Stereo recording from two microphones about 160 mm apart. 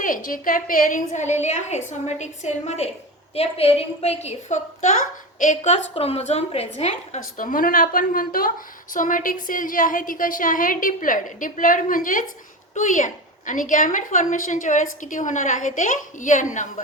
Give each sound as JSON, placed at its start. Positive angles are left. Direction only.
{"t": 0.0, "sound": "a woman's voice", "side_deg": 60}